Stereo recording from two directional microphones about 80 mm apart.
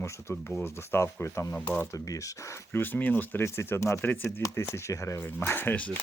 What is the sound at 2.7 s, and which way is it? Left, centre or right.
Speech, left.